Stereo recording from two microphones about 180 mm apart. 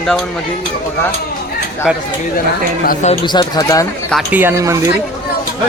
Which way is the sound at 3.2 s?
25° left (ahead or behind).